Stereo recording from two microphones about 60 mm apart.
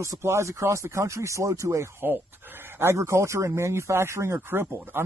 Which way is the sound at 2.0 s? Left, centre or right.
Right.